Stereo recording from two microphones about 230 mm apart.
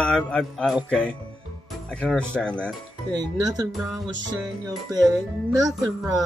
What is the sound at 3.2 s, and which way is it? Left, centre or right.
Speech, centre.